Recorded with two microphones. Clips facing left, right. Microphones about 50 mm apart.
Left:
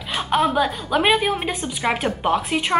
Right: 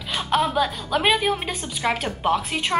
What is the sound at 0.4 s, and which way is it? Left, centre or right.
A woman's voice, centre.